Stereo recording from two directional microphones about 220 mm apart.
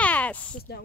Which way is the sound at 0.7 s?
45° left (ahead or behind).